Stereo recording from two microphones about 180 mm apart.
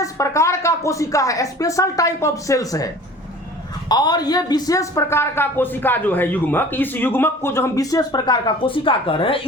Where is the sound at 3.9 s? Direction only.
20° left (ahead or behind).